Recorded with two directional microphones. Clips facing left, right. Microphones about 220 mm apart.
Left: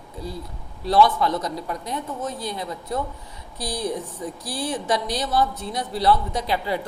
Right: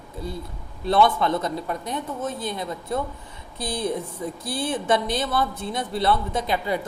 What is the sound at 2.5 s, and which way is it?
A woman's voice, 25° right (ahead or behind).